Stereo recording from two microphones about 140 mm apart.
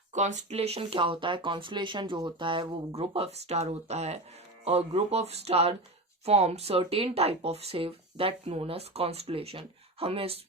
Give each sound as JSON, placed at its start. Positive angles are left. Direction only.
{"t": 0.1, "sound": "speech", "side_deg": -60}